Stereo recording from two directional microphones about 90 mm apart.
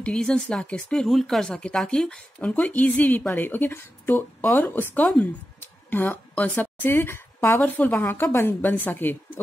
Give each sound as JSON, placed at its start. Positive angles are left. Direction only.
{"t": 0.0, "sound": "speech", "side_deg": 10}
{"t": 7.6, "sound": "a woman's voice", "side_deg": 20}